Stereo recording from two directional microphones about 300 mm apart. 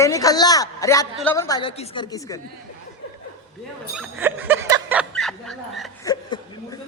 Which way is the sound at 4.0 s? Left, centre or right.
Centre.